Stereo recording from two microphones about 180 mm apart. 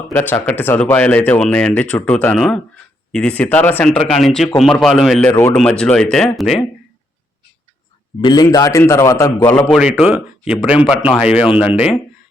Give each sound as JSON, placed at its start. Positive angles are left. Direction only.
{"t": 0.1, "sound": "speech", "side_deg": 10}
{"t": 8.2, "sound": "speech", "side_deg": 20}
{"t": 10.0, "sound": "speech", "side_deg": -5}